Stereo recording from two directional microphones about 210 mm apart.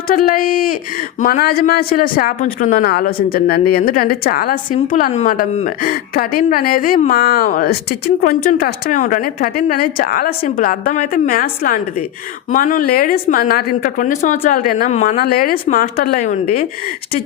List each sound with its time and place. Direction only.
0.1 s a woman's voice: 40° left (ahead or behind)
15.2 s a woman's voice: 45° left (ahead or behind)